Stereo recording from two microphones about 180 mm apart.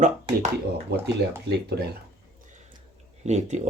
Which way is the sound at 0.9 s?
65° right (ahead or behind).